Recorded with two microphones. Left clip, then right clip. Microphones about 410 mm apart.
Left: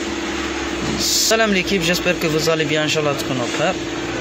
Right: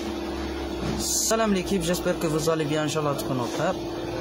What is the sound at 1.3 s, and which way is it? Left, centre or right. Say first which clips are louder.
Speech: left 6 dB; right.